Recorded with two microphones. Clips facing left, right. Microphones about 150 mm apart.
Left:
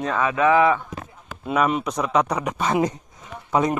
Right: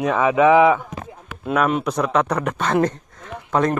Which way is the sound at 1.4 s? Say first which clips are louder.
Right 2 dB; centre (ahead or behind).